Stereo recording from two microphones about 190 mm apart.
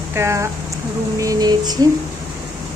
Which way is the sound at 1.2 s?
20° right (ahead or behind).